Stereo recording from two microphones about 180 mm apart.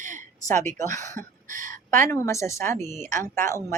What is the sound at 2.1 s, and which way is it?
Speech, 15° left (ahead or behind).